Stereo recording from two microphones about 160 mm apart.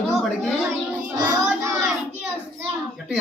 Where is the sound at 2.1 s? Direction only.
15° right (ahead or behind).